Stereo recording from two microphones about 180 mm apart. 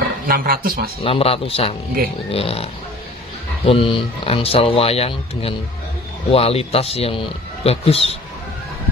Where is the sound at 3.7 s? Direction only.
30° left (ahead or behind).